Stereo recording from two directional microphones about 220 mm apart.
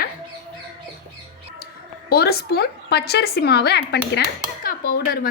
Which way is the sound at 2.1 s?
45° left (ahead or behind).